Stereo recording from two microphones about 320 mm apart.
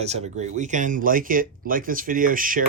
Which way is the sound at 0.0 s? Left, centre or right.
Centre.